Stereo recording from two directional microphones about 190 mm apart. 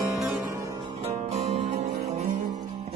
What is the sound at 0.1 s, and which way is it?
Music, centre (ahead or behind).